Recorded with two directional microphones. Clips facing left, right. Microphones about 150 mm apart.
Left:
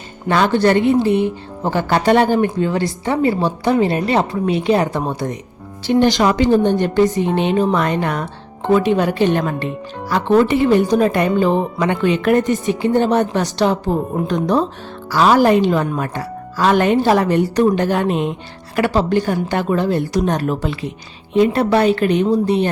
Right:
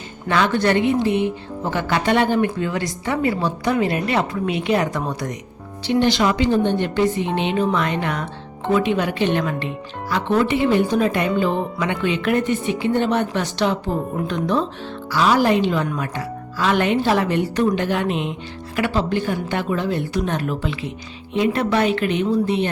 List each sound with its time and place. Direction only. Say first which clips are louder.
0.3 s speech: left 4 dB; 35° left (ahead or behind)
5.8 s a woman's voice: left 4 dB; 45° left (ahead or behind)